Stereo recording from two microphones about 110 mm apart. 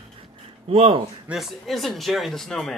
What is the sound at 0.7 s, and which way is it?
Speech, 55° right (ahead or behind).